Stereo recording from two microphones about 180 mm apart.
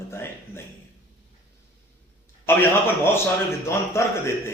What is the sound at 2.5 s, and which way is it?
Speech, 15° left (ahead or behind).